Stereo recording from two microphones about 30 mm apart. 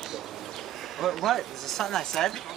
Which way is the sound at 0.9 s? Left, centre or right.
Centre.